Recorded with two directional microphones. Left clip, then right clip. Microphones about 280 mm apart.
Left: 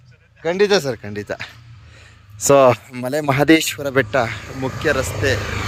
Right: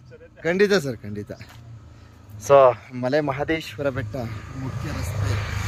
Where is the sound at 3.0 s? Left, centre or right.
Centre.